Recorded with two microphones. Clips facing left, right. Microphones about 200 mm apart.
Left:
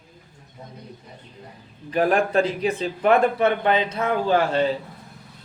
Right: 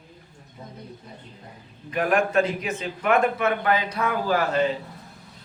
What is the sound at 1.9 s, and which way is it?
A man's voice, 35° left (ahead or behind).